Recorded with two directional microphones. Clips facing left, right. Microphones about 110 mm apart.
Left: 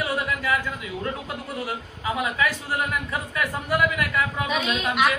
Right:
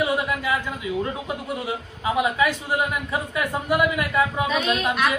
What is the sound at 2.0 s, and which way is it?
A man's voice, 20° right (ahead or behind).